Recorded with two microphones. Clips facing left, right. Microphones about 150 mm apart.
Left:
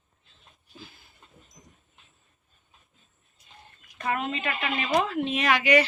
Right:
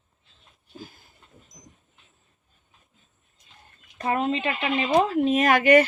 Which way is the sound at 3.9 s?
30° right (ahead or behind).